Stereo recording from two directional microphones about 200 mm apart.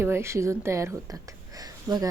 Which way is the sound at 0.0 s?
10° right (ahead or behind).